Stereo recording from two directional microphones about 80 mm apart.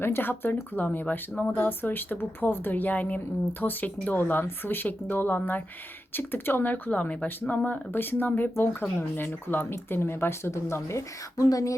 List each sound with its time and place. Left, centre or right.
0.0 s speech: left